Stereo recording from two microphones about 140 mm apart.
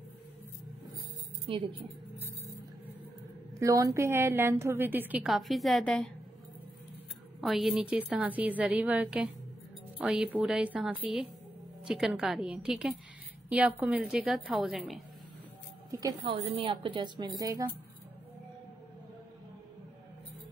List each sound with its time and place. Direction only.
3.5 s a woman's voice: 25° right (ahead or behind)
5.2 s a woman's voice: centre (ahead or behind)
7.3 s a woman's voice: centre (ahead or behind)
15.9 s speech: 25° right (ahead or behind)